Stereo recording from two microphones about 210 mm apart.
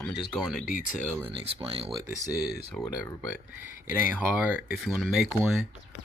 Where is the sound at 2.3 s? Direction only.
50° left (ahead or behind).